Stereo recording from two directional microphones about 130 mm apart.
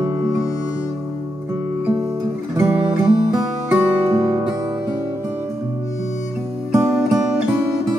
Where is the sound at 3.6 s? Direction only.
10° right (ahead or behind).